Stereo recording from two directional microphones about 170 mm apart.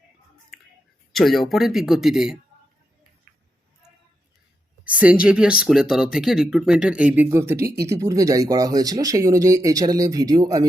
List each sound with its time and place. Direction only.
1.1 s speech: centre (ahead or behind)
4.9 s speech: 10° right (ahead or behind)